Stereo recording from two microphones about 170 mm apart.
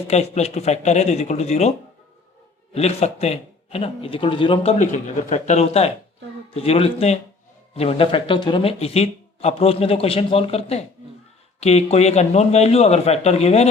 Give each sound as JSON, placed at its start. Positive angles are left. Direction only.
{"t": 0.1, "sound": "a man's voice", "side_deg": 40}
{"t": 2.7, "sound": "a man's voice", "side_deg": 35}